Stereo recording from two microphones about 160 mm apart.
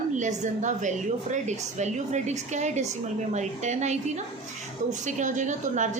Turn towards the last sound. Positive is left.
turn(degrees=-50)  # may be behind; listen again after turning